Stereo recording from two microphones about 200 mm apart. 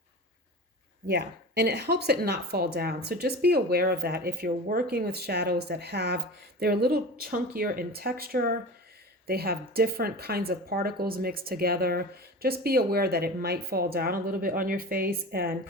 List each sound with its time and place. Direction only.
1.0 s speech: 55° right (ahead or behind)